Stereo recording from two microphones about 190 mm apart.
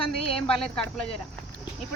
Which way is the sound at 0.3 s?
5° left (ahead or behind).